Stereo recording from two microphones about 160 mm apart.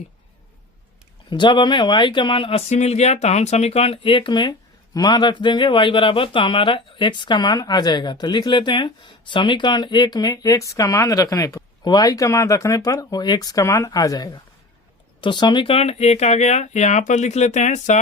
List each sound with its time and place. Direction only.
1.3 s a man's voice: 30° left (ahead or behind); by 18.0 s 45° left (ahead or behind)